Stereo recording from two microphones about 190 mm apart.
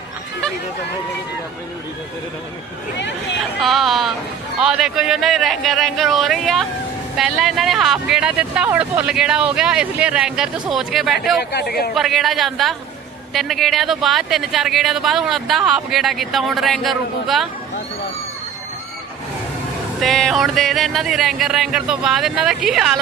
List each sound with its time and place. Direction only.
3.6 s a sound: centre (ahead or behind)
4.6 s speech: centre (ahead or behind)
11.5 s speech: 55° left (ahead or behind)
11.9 s speech: centre (ahead or behind)
20.0 s speech: centre (ahead or behind)